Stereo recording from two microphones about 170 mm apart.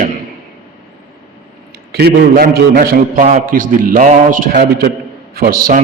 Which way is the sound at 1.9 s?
70° right (ahead or behind).